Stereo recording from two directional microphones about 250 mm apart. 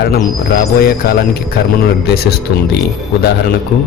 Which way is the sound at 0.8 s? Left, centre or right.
Left.